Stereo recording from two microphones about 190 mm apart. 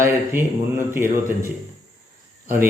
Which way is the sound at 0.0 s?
15° right (ahead or behind).